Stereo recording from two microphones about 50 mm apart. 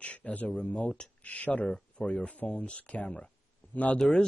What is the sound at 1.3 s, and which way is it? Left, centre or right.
Speech, left.